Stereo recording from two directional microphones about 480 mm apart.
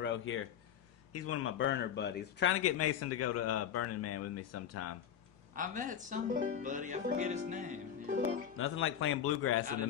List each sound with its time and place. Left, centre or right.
0.0 s a man's voice: left
5.5 s speech: centre
8.5 s a man's voice: left